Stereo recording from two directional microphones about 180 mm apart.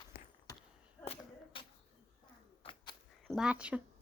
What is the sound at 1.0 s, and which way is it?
Whip, 35° left (ahead or behind).